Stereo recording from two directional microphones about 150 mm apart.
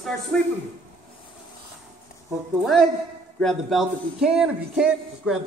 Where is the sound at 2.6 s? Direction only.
Centre (ahead or behind).